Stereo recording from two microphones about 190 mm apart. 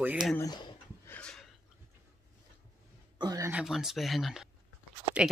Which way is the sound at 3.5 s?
Centre (ahead or behind).